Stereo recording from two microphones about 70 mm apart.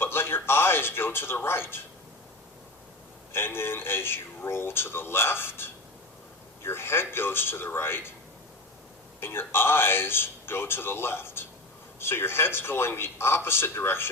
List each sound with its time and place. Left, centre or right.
0.0 s speech: left
3.3 s speech: left
9.2 s speech: left